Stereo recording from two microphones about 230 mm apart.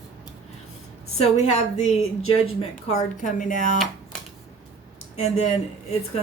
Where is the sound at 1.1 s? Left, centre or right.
Left.